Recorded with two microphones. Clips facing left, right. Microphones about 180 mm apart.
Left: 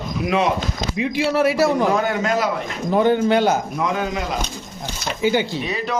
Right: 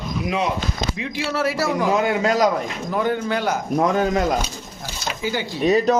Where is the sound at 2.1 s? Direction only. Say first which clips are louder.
Right 2 dB; 30° right (ahead or behind).